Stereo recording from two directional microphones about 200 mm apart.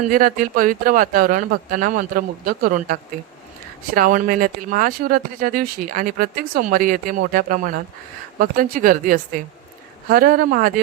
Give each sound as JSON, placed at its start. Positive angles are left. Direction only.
{"t": 0.0, "sound": "speech", "side_deg": -45}